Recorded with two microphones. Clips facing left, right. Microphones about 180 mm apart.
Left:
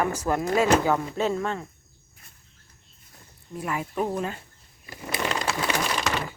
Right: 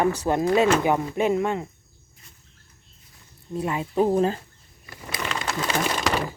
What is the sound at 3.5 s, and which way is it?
Speech, 25° right (ahead or behind).